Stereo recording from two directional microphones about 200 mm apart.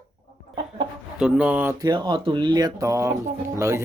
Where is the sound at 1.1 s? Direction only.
5° right (ahead or behind).